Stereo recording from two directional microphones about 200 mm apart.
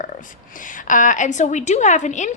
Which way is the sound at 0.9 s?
40° left (ahead or behind).